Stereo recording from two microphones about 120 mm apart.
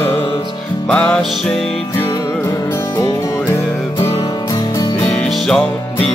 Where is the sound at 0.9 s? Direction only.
10° left (ahead or behind).